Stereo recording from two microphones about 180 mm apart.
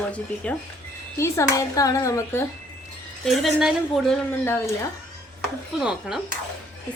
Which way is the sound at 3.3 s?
Centre (ahead or behind).